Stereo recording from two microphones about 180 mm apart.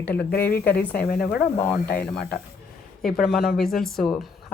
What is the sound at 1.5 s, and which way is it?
Speech, 10° left (ahead or behind).